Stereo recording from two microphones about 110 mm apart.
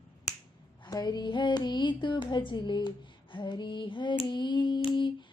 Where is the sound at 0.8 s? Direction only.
40° left (ahead or behind).